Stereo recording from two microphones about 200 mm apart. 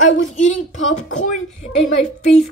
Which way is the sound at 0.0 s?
35° left (ahead or behind).